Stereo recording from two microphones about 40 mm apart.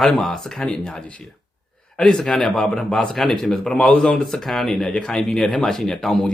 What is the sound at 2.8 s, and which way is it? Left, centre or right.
Speech, left.